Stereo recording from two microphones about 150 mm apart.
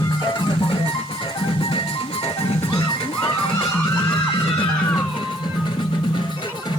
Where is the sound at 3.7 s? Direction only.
15° left (ahead or behind).